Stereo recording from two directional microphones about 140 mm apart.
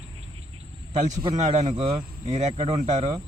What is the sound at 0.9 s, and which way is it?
Speech, 55° right (ahead or behind).